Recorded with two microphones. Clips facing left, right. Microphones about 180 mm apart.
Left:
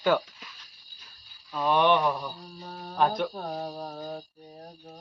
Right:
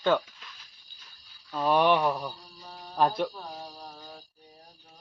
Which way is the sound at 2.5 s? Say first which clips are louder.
Left 5 dB; 55° left (ahead or behind).